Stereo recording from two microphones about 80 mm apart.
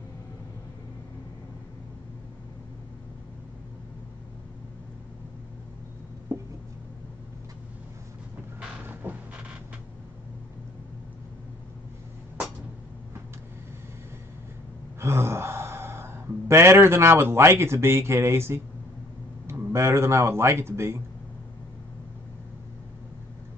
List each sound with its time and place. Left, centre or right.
6.3 s writing: right
9.0 s vehicle: right
15.0 s gasp: right
19.7 s speech: right